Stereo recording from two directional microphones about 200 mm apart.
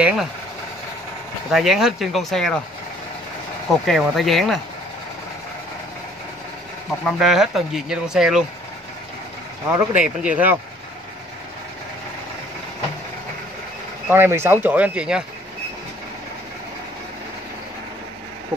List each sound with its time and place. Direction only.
0.0 s speech: centre (ahead or behind)
1.5 s speech: centre (ahead or behind)
3.8 s speech: centre (ahead or behind)
7.1 s speech: centre (ahead or behind)
9.7 s speech: 10° right (ahead or behind)
14.0 s speech: 10° right (ahead or behind)